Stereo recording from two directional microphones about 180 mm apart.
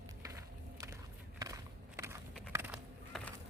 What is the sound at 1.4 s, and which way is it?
Walk, 20° right (ahead or behind).